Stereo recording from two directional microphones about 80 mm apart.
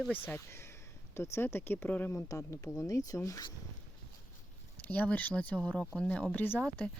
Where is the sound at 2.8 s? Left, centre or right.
Left.